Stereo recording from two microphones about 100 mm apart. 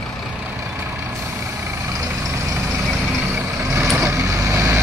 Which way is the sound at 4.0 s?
25° right (ahead or behind).